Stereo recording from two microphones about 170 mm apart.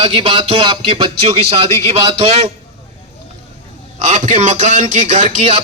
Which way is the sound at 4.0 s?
45° right (ahead or behind).